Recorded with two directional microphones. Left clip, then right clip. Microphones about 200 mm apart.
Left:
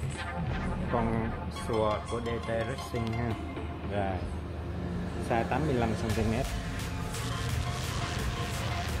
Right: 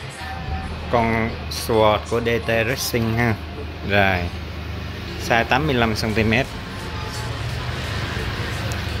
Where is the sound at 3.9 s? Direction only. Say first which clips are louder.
Right 16 dB; 20° right (ahead or behind).